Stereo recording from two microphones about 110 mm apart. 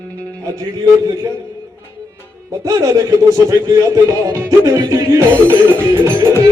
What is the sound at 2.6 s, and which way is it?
Speech, 30° right (ahead or behind).